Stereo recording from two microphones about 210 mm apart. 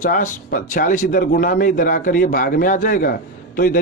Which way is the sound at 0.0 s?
40° left (ahead or behind).